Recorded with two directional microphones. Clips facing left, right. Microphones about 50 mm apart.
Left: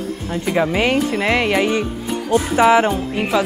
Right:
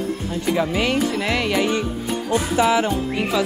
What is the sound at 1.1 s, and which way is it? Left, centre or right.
Speech, left.